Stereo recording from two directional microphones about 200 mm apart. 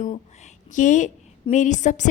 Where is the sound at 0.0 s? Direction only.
40° left (ahead or behind).